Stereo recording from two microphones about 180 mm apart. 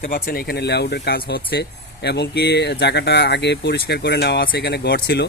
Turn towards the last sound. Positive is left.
turn(degrees=65)  # may be behind; listen again after turning